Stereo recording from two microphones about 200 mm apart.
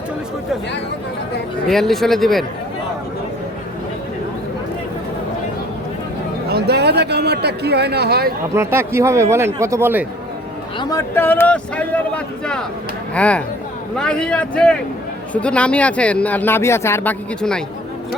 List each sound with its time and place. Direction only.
1.6 s speech: centre (ahead or behind)
6.5 s speech: 55° right (ahead or behind)
8.5 s speech: 10° right (ahead or behind)
10.8 s speech: 15° left (ahead or behind)